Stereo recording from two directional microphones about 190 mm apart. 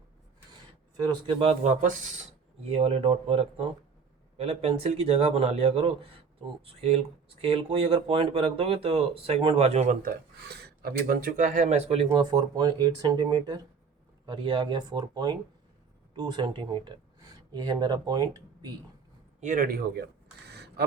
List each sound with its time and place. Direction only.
1.0 s speech: 25° right (ahead or behind)
12.3 s speech: 20° right (ahead or behind)
19.4 s speech: 45° right (ahead or behind)
20.5 s a sound: 60° right (ahead or behind)